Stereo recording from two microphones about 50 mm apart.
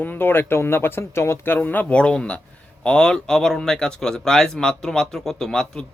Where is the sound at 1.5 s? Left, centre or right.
Left.